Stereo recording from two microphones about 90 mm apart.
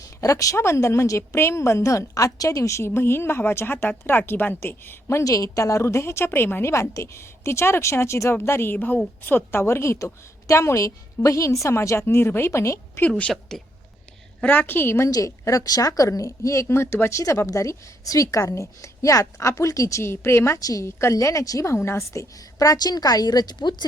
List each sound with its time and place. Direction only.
0.2 s a woman's voice: 40° left (ahead or behind)
13.1 s a woman's voice: 15° left (ahead or behind)
14.4 s a woman's voice: 20° left (ahead or behind)
15.1 s a woman's voice: 40° left (ahead or behind)
20.6 s a woman's voice: 40° left (ahead or behind); by 23.8 s 55° left (ahead or behind)